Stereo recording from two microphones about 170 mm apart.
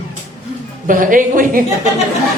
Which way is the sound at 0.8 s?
50° right (ahead or behind).